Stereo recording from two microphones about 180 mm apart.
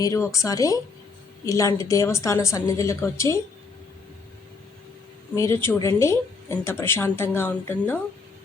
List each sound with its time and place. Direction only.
0.0 s speech: 15° left (ahead or behind)
5.3 s speech: 15° left (ahead or behind)